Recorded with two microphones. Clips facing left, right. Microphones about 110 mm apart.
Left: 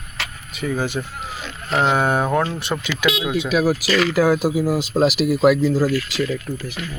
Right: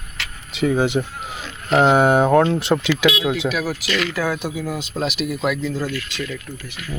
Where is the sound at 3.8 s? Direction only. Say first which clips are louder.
Left 5 dB; 35° left (ahead or behind).